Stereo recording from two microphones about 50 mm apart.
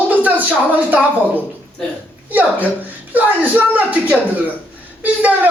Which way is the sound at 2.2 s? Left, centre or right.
Right.